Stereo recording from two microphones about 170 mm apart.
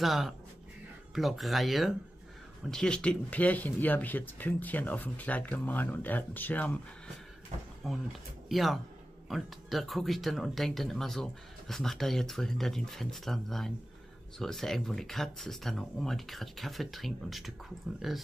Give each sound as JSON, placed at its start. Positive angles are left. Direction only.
{"t": 0.0, "sound": "speech", "side_deg": 0}
{"t": 7.8, "sound": "speech", "side_deg": 0}